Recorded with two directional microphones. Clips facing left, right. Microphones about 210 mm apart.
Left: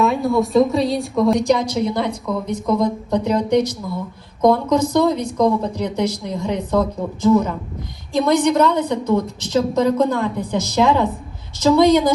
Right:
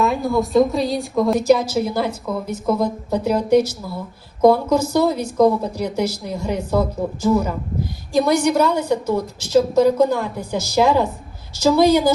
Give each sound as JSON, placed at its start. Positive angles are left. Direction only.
{"t": 0.0, "sound": "a woman's voice", "side_deg": 0}